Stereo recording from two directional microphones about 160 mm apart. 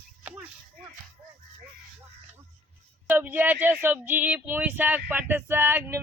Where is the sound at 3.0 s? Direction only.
10° right (ahead or behind).